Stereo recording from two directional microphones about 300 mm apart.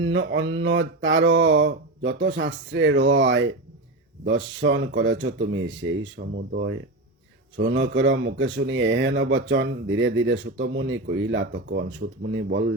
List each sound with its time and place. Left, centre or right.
0.0 s speech: right